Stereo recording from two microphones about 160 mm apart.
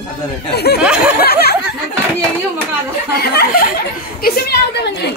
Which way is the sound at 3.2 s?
75° left (ahead or behind).